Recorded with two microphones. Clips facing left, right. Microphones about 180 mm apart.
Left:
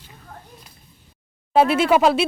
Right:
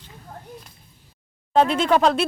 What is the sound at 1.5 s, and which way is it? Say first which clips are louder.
Speech: left 2 dB; 10° left (ahead or behind).